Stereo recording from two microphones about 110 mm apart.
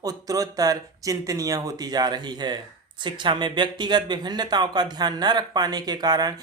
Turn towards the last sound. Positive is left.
turn(degrees=-35)  # may be behind; listen again after turning